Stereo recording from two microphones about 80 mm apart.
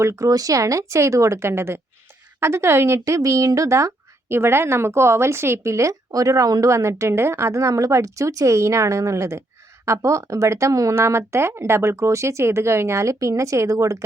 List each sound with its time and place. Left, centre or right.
0.0 s speech: right